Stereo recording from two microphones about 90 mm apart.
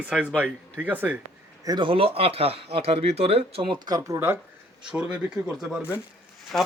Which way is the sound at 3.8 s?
45° right (ahead or behind).